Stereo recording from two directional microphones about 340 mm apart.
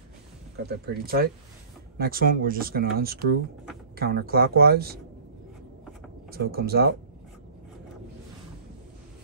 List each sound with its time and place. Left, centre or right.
0.7 s speech: right
6.3 s speech: right